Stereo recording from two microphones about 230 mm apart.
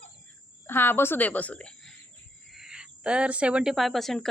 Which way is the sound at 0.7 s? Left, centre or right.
Centre.